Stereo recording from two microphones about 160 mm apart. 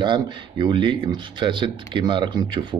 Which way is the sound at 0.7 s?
30° right (ahead or behind).